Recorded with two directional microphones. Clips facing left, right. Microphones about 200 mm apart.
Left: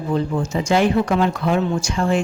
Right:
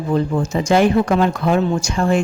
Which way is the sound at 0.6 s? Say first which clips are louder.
Right 3 dB; 45° right (ahead or behind).